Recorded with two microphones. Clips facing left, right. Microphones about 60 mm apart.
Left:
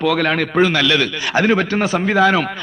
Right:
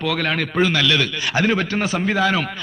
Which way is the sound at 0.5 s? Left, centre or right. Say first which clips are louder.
Left 2 dB; left.